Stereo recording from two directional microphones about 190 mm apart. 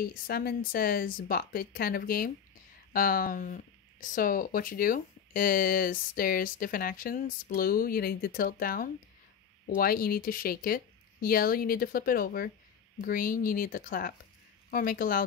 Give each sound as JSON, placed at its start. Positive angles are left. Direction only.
{"t": 0.0, "sound": "speech", "side_deg": 55}